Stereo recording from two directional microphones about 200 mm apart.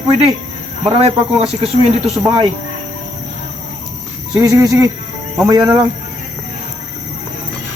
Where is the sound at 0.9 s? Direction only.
30° right (ahead or behind).